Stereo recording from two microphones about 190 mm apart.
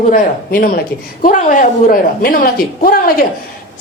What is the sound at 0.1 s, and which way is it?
A man's voice, 45° left (ahead or behind).